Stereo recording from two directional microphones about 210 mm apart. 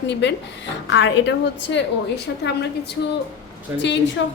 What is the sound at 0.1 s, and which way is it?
A woman's voice, 55° left (ahead or behind).